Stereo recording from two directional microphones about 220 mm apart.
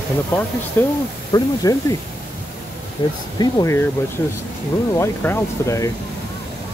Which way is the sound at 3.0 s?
20° left (ahead or behind).